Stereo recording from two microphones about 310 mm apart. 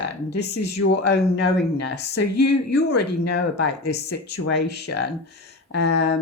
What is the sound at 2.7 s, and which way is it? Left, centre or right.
A woman's voice, left.